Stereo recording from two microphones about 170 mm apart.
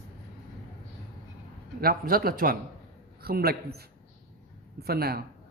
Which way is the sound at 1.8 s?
60° right (ahead or behind).